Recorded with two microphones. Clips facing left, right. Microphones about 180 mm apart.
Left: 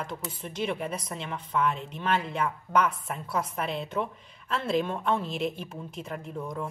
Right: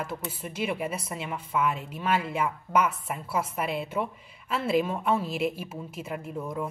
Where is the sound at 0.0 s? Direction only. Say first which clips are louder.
Right 2 dB; 5° right (ahead or behind).